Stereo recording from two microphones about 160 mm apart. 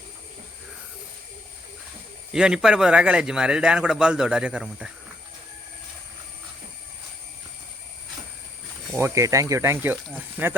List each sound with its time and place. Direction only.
2.3 s a man's voice: 5° right (ahead or behind)
8.9 s speech: 15° right (ahead or behind)